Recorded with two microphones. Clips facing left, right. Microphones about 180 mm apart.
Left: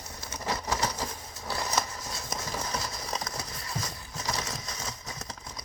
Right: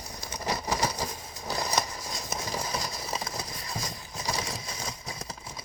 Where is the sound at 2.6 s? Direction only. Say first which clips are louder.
Right 1 dB; 10° right (ahead or behind).